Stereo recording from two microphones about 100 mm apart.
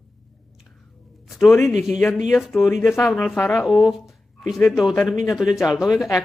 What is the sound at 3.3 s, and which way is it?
Speech, 25° left (ahead or behind).